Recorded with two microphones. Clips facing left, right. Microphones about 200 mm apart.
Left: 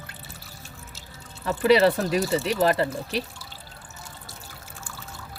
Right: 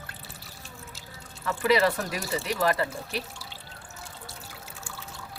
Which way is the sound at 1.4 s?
30° left (ahead or behind).